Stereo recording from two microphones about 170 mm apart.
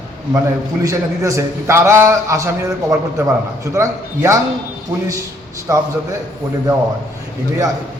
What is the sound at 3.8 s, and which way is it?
Speech, 15° right (ahead or behind).